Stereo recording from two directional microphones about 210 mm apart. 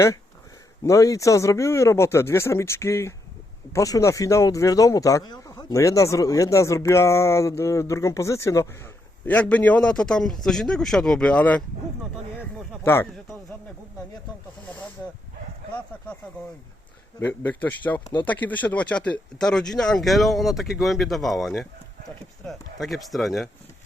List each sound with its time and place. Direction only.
0.9 s speech: 15° left (ahead or behind)
17.2 s speech: 10° left (ahead or behind)
18.0 s speech: 20° left (ahead or behind)
18.3 s speech: 10° left (ahead or behind)